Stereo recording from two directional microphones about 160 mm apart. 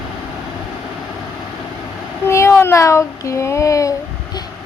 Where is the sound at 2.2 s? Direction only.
15° left (ahead or behind).